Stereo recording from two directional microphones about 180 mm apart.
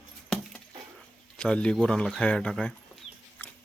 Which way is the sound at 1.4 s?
5° left (ahead or behind).